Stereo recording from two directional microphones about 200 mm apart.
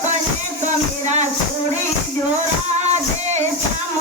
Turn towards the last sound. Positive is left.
turn(degrees=-35)  # may be behind; listen again after turning